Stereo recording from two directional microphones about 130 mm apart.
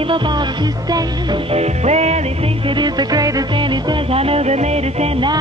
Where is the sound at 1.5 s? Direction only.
55° right (ahead or behind).